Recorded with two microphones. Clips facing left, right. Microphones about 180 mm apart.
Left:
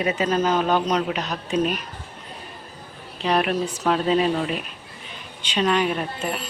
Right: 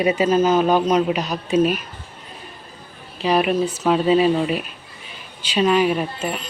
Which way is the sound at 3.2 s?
5° right (ahead or behind).